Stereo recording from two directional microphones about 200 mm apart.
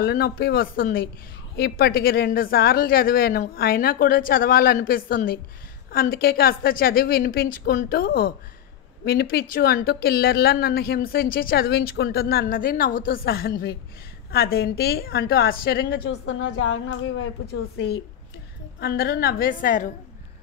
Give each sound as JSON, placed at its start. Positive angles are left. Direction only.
{"t": 0.0, "sound": "a woman's voice", "side_deg": 50}
{"t": 16.3, "sound": "a woman's voice", "side_deg": 80}
{"t": 17.7, "sound": "a woman's voice", "side_deg": 55}